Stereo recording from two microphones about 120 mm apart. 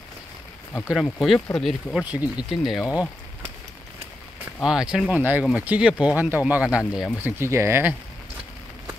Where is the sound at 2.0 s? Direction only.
10° right (ahead or behind).